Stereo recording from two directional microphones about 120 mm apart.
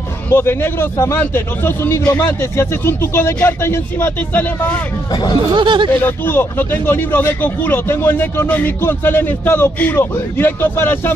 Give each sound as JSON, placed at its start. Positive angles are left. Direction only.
{"t": 0.3, "sound": "a man's voice", "side_deg": 20}
{"t": 5.1, "sound": "speech", "side_deg": 35}
{"t": 5.5, "sound": "speech", "side_deg": -45}
{"t": 5.9, "sound": "speech", "side_deg": 20}